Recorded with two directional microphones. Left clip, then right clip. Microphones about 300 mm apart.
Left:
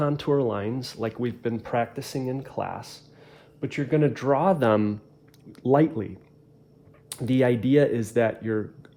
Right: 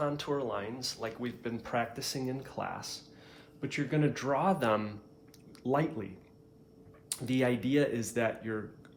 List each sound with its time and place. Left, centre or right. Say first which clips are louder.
0.0 s speech: left 9 dB; left
7.1 s speech: left 8 dB; left